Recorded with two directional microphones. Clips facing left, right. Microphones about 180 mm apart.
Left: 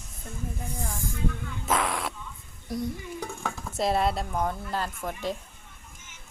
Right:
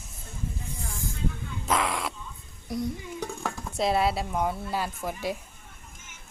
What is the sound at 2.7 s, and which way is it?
A woman's voice, centre (ahead or behind).